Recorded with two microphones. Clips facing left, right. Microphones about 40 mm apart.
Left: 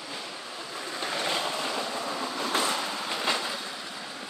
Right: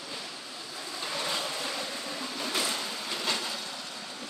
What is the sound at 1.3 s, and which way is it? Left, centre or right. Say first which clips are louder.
Boat: left 4 dB; left.